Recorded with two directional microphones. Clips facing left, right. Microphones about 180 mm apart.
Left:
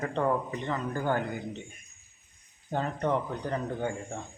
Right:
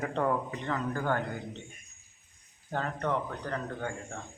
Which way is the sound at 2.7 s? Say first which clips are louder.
Left 3 dB; 15° left (ahead or behind).